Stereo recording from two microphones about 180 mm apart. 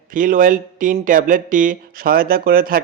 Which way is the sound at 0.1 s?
50° right (ahead or behind).